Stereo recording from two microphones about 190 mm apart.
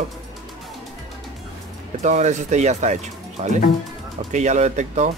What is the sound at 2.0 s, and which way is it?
Speech, 40° right (ahead or behind).